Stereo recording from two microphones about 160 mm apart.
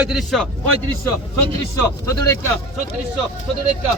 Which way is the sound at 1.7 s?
20° left (ahead or behind).